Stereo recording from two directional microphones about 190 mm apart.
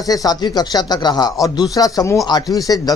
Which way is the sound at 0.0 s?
20° left (ahead or behind).